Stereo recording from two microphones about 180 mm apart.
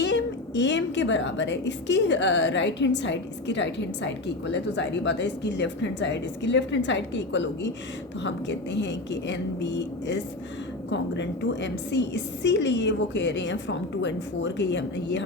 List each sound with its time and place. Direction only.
0.0 s a woman's voice: 80° left